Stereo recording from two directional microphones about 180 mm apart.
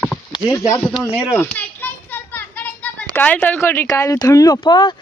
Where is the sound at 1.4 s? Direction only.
10° left (ahead or behind); by 4.9 s 25° left (ahead or behind).